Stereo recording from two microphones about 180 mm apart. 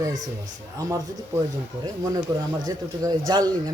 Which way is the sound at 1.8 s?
20° right (ahead or behind).